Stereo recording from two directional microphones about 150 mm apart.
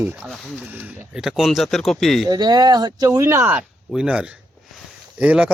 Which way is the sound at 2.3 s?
25° right (ahead or behind).